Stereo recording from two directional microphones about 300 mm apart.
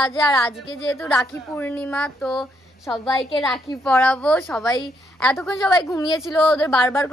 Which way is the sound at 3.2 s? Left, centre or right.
Centre.